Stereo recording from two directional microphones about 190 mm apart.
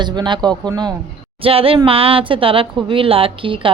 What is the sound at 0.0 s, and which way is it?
Speech, 25° right (ahead or behind).